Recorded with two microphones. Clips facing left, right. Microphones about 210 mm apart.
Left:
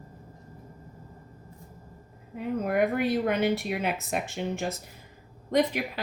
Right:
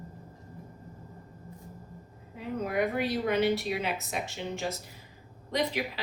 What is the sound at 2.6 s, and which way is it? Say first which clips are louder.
A woman's voice: left 3 dB; 55° left (ahead or behind).